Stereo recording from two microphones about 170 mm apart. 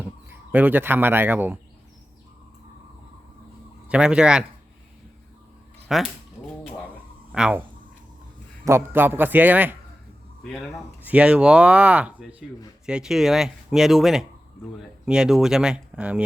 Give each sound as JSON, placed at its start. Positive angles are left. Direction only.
{"t": 0.0, "sound": "speech", "side_deg": -10}
{"t": 3.8, "sound": "speech", "side_deg": -5}
{"t": 5.9, "sound": "speech", "side_deg": 0}
{"t": 7.3, "sound": "speech", "side_deg": -5}
{"t": 8.6, "sound": "a man's voice", "side_deg": -15}
{"t": 10.4, "sound": "speech", "side_deg": 5}
{"t": 11.0, "sound": "speech", "side_deg": -10}